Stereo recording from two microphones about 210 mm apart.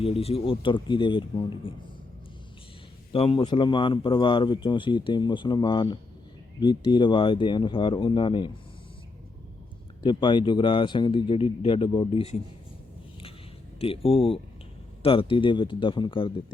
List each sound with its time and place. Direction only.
0.0 s a man's voice: 30° left (ahead or behind)
3.1 s a man's voice: 25° left (ahead or behind)
10.0 s a man's voice: 20° left (ahead or behind)
13.7 s a man's voice: 25° left (ahead or behind)